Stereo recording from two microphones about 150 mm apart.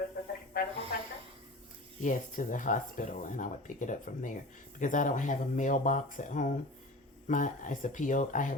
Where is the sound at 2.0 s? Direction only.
60° left (ahead or behind).